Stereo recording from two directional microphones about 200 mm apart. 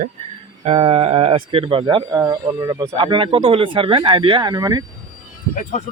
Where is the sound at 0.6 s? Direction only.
30° right (ahead or behind).